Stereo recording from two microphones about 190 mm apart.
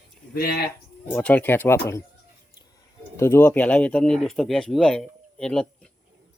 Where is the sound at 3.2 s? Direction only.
15° left (ahead or behind).